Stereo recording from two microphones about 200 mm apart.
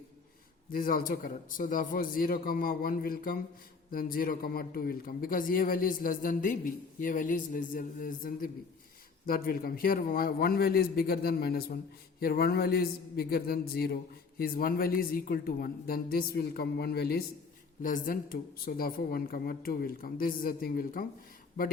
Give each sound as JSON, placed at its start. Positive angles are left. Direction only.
{"t": 0.7, "sound": "a man's voice", "side_deg": 45}